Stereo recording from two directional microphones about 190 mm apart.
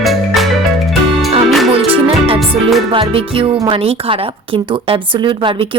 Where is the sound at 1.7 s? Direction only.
30° right (ahead or behind).